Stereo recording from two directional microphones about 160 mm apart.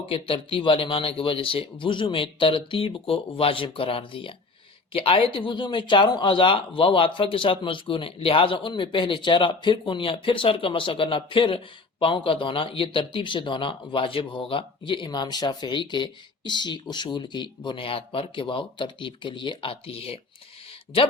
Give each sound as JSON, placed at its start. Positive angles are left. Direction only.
{"t": 0.0, "sound": "speech", "side_deg": 35}